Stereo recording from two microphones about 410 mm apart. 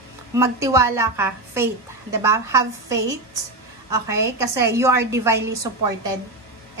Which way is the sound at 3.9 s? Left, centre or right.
Centre.